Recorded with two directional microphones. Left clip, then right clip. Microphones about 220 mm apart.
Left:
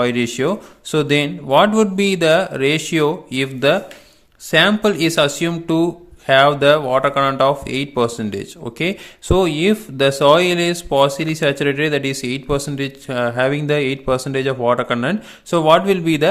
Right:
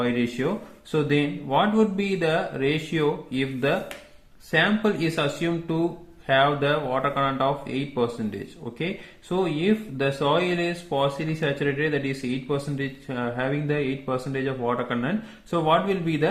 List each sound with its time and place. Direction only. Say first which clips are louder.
0.0 s speech: left 8 dB; 45° left (ahead or behind)